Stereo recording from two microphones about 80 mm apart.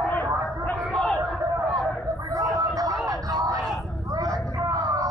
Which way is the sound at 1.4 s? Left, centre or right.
Right.